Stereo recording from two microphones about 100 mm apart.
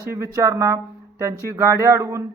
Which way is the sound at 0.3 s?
35° right (ahead or behind).